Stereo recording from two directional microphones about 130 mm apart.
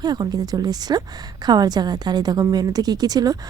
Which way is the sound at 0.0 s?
30° right (ahead or behind).